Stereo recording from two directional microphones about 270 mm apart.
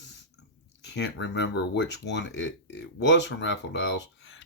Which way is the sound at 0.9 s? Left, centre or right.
Left.